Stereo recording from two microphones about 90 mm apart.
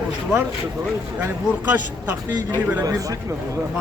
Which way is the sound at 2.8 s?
40° right (ahead or behind).